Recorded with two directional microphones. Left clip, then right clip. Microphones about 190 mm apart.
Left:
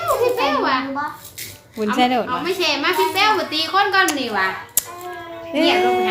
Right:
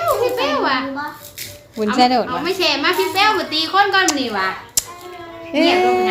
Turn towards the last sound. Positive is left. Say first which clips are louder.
# right 2 dB
turn(degrees=-10)  # may be behind; listen again after turning